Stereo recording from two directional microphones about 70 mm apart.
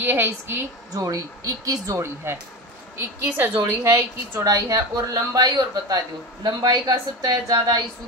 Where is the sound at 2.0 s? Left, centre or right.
Right.